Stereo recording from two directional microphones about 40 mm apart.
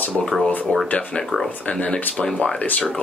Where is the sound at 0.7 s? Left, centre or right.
Left.